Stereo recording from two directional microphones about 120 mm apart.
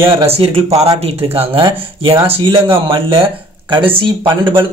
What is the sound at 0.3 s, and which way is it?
Speech, 55° right (ahead or behind).